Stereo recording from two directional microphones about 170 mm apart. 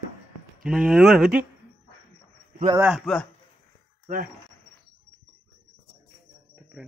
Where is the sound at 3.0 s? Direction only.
5° left (ahead or behind).